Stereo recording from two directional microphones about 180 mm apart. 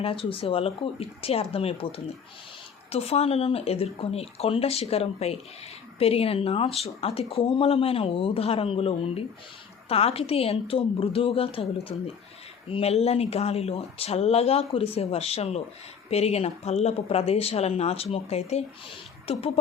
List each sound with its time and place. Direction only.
0.0 s speech: 30° left (ahead or behind)